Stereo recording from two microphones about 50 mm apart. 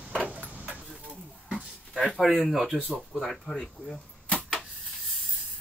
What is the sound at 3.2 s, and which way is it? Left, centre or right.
Speech, centre.